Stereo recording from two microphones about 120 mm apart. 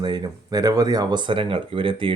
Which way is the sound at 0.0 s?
35° right (ahead or behind).